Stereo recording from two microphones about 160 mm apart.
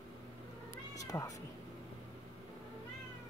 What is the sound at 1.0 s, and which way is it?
Cat, 20° left (ahead or behind).